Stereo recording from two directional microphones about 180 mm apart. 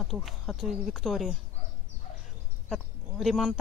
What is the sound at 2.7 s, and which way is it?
Speech, centre (ahead or behind).